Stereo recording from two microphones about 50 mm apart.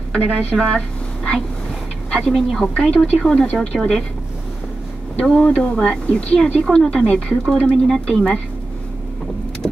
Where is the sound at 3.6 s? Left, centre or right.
Centre.